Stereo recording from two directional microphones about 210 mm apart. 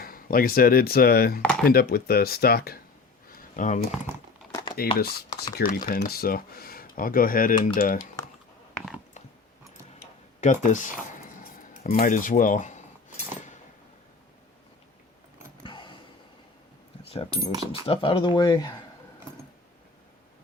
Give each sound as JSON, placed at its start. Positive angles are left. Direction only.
{"t": 0.0, "sound": "speech", "side_deg": 45}
{"t": 3.3, "sound": "a sound", "side_deg": 40}
{"t": 4.8, "sound": "speech", "side_deg": 45}
{"t": 10.4, "sound": "speech", "side_deg": 35}
{"t": 15.6, "sound": "a sound", "side_deg": 25}
{"t": 17.1, "sound": "speech", "side_deg": 25}